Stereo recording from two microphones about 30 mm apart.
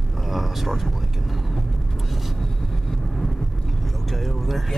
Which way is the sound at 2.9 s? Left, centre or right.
Centre.